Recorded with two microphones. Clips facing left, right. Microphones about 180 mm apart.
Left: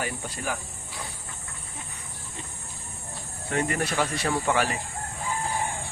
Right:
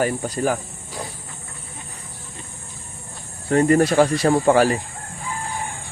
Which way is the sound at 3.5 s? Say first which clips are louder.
Right 11 dB; 40° right (ahead or behind).